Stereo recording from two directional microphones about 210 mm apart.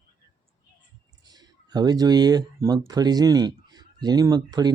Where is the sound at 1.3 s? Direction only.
20° right (ahead or behind).